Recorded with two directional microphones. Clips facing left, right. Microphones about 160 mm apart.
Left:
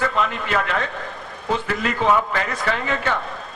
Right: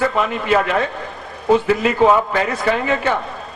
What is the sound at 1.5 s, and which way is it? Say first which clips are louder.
A man's voice: right 8 dB; 15° right (ahead or behind).